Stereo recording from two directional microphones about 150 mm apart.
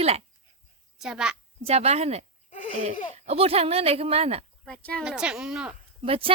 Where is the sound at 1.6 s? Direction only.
45° right (ahead or behind).